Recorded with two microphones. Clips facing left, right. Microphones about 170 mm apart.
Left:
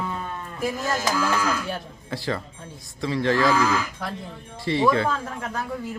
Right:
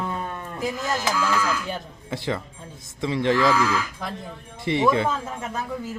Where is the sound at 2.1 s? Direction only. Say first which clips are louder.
Right 1 dB; 20° right (ahead or behind).